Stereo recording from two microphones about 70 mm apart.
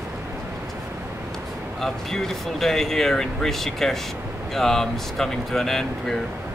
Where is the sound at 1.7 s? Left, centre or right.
Centre.